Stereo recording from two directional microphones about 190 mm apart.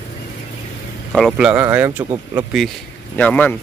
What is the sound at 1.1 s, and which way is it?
Speech, centre (ahead or behind).